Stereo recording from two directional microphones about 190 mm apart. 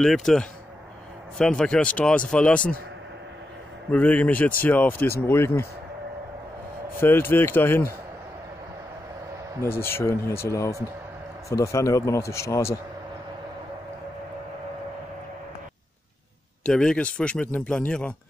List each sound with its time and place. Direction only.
0.0 s a man's voice: centre (ahead or behind)
1.6 s speech: 5° left (ahead or behind)
3.9 s speech: 10° left (ahead or behind)
7.0 s speech: 10° left (ahead or behind)
9.6 s speech: 10° left (ahead or behind)
16.6 s a man's voice: 5° left (ahead or behind)